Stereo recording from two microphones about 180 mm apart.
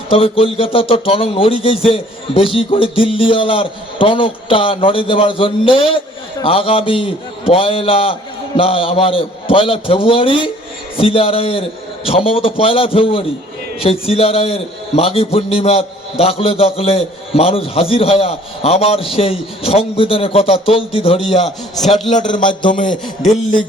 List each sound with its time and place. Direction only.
0.1 s a man's voice: 30° left (ahead or behind)
22.7 s a man's voice: 45° left (ahead or behind)